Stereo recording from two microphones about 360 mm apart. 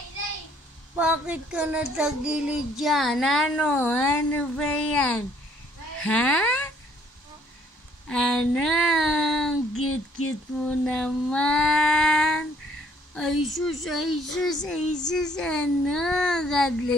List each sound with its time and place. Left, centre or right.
0.9 s female singing: centre
6.0 s speech: centre
8.1 s female singing: centre
9.8 s a sound: left
10.7 s female singing: centre